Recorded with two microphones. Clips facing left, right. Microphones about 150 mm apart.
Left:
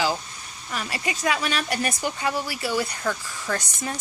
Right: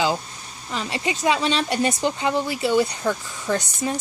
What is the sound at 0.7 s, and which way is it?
Speech, 20° right (ahead or behind).